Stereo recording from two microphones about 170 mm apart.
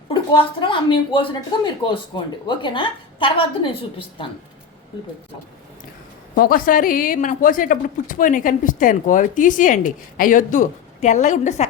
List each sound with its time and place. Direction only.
0.1 s a woman's voice: 30° left (ahead or behind)
6.3 s a woman's voice: 55° left (ahead or behind)